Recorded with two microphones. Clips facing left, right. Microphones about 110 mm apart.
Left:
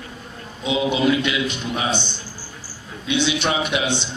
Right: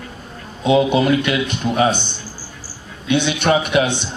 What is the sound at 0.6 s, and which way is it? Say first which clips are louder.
A man's voice: right 5 dB; 50° right (ahead or behind).